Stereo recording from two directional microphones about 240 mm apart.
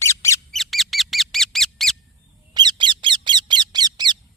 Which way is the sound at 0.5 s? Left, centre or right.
Centre.